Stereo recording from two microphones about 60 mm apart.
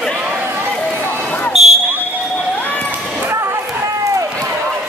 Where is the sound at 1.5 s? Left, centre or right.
Centre.